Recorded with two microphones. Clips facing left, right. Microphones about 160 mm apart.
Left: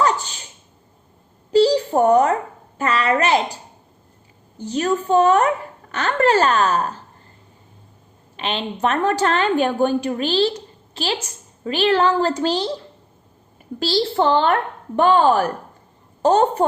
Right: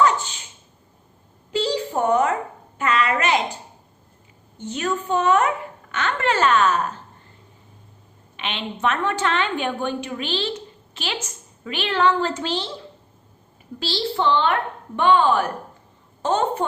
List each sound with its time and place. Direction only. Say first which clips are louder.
1.5 s a sound: left 8 dB; 40° left (ahead or behind)
2.7 s a woman's voice: left 2 dB; 35° left (ahead or behind)
8.4 s a woman's voice: left 4 dB; 35° left (ahead or behind)
13.7 s a woman's voice: left 6 dB; 40° left (ahead or behind)